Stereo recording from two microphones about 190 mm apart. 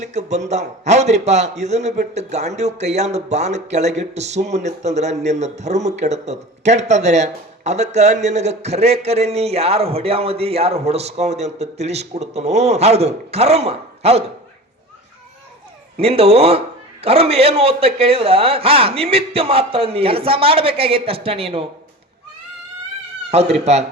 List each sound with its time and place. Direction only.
0.0 s a man's voice: 35° right (ahead or behind)
16.0 s a man's voice: 30° right (ahead or behind)
23.3 s a man's voice: 35° right (ahead or behind)